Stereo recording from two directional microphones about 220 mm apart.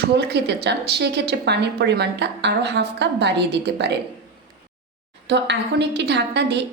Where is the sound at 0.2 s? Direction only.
50° right (ahead or behind).